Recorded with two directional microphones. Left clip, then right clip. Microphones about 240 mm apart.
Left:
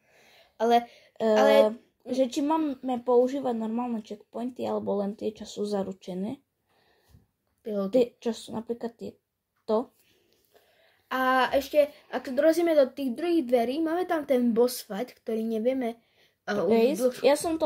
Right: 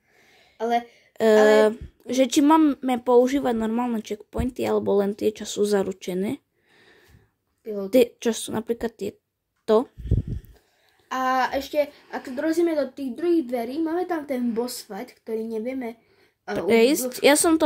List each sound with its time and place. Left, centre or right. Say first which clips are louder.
0.6 s speech: left 1 dB; left
1.7 s speech: right 6 dB; right
7.6 s a woman's voice: even; centre
7.9 s speech: right 6 dB; right
11.1 s a woman's voice: right 1 dB; centre
16.6 s speech: right 4 dB; right